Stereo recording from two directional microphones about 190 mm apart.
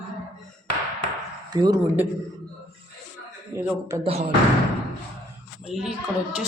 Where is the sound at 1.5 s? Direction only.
20° right (ahead or behind).